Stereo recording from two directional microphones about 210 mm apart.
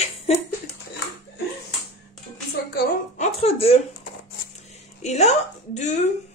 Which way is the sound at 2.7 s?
45° left (ahead or behind).